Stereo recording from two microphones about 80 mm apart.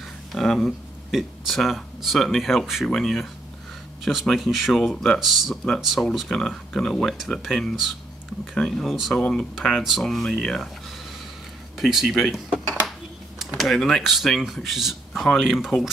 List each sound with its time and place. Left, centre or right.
0.3 s speech: centre
11.8 s speech: centre